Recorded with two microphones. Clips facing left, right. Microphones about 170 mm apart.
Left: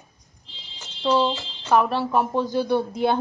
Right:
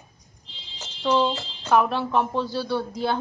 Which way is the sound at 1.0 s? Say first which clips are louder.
Left 1 dB; 5° left (ahead or behind).